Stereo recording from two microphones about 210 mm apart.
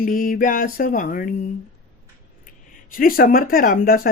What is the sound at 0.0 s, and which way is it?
Speech, 40° left (ahead or behind).